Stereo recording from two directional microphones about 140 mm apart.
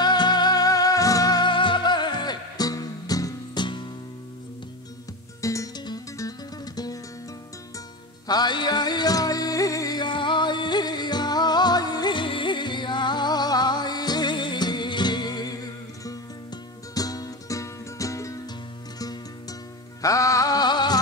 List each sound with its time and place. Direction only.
0.0 s music: 30° left (ahead or behind)
5.4 s music: 25° left (ahead or behind)
8.3 s music: 30° left (ahead or behind)
20.0 s music: 25° left (ahead or behind)